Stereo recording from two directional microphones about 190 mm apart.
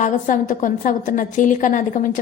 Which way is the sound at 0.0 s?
45° left (ahead or behind).